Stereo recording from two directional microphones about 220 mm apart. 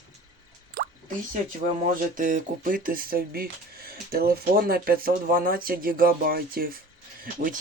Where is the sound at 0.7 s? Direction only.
40° right (ahead or behind).